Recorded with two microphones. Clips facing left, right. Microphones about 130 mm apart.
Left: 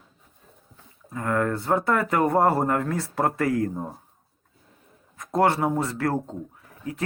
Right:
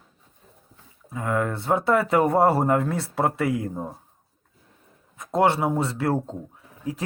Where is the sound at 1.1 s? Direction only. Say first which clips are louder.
Left 1 dB; 10° right (ahead or behind).